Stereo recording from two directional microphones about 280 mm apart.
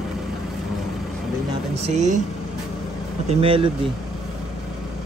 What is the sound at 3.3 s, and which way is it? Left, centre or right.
Speech, centre.